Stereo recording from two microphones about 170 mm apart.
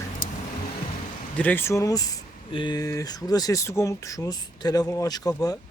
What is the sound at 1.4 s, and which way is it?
Speech, 10° left (ahead or behind).